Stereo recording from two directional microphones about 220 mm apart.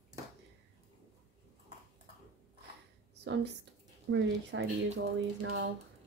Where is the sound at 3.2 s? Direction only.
50° right (ahead or behind).